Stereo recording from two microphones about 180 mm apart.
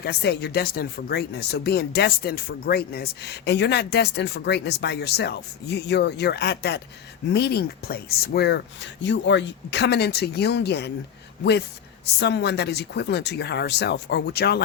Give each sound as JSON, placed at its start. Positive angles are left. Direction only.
{"t": 0.0, "sound": "speech", "side_deg": 65}
{"t": 12.2, "sound": "speech", "side_deg": 70}